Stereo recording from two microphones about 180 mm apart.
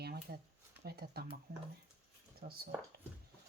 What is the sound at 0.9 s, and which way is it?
Speech, 60° right (ahead or behind).